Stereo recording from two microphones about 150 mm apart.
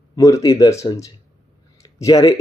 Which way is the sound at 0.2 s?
20° left (ahead or behind).